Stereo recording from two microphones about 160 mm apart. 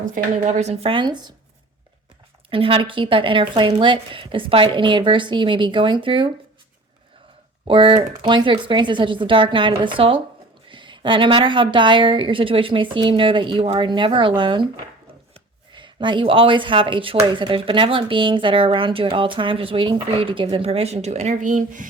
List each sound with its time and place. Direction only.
0.0 s speech: 50° right (ahead or behind); by 1.3 s 25° right (ahead or behind)
2.5 s speech: 35° right (ahead or behind)
7.7 s speech: 30° right (ahead or behind)
15.7 s speech: 30° right (ahead or behind); by 21.8 s 55° right (ahead or behind)